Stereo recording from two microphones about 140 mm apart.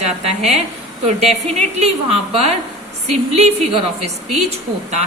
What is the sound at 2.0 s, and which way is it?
A woman's voice, 45° right (ahead or behind).